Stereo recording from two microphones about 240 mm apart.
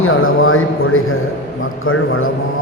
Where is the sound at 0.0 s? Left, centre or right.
Left.